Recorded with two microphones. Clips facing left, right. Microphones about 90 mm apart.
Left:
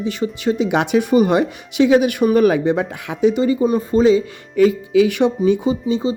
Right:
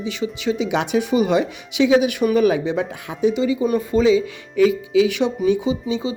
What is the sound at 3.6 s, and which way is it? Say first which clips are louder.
Speech: left 2 dB; 35° left (ahead or behind).